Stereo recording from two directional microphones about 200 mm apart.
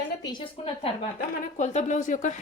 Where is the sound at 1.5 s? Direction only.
35° left (ahead or behind).